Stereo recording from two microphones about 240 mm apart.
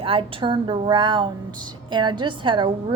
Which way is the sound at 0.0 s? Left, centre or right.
Right.